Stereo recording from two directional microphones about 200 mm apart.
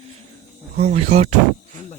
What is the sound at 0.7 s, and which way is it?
Speech, 30° right (ahead or behind).